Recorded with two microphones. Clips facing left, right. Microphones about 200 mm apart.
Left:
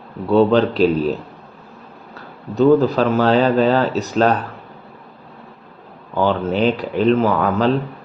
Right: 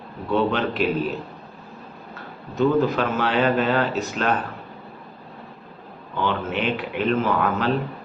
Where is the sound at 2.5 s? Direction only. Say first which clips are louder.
Left 6 dB; 35° left (ahead or behind).